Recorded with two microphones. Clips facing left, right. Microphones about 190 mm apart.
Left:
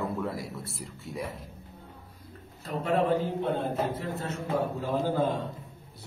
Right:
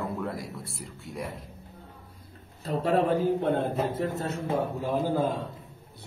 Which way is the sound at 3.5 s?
60° right (ahead or behind).